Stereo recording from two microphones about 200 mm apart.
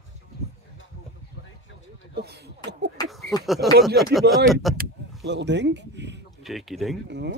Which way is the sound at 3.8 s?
Centre (ahead or behind).